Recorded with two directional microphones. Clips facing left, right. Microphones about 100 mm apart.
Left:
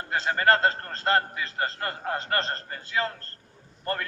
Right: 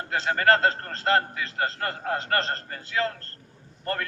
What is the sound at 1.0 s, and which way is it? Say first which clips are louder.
A man's voice: right 1 dB; 30° left (ahead or behind).